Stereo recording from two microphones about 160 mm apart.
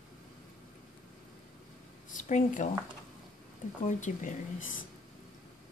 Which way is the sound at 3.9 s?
50° left (ahead or behind).